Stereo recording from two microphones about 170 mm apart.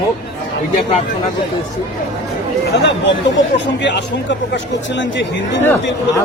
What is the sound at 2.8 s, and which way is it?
Speech, 90° left.